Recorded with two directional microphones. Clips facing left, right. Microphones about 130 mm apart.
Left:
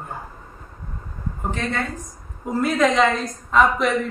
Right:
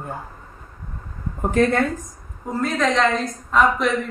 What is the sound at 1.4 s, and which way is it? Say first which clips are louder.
Speech: right 8 dB; 50° right (ahead or behind).